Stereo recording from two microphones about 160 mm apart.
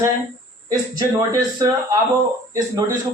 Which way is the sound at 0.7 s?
20° right (ahead or behind).